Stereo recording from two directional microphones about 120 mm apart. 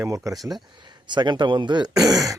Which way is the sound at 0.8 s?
40° right (ahead or behind).